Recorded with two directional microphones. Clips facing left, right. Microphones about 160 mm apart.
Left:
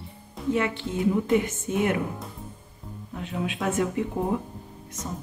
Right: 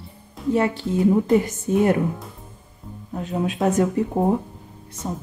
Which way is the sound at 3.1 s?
40° right (ahead or behind).